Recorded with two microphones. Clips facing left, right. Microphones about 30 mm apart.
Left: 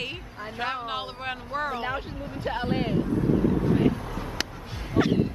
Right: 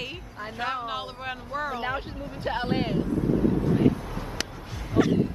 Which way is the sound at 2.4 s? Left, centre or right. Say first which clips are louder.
Right 1 dB; centre.